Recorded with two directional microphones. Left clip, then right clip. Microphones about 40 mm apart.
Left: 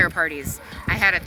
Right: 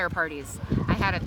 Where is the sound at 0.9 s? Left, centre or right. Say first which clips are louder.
Left 8 dB; right.